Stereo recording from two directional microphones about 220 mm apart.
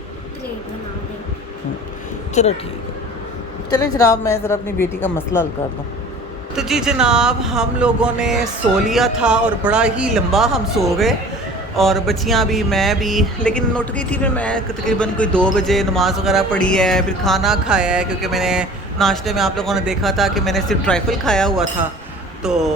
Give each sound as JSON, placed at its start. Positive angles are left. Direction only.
{"t": 2.4, "sound": "speech", "side_deg": 30}
{"t": 3.7, "sound": "a woman's voice", "side_deg": 15}
{"t": 6.6, "sound": "speech", "side_deg": 0}